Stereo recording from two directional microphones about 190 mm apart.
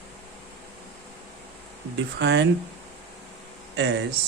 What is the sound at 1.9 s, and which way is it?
Speech, 65° right (ahead or behind).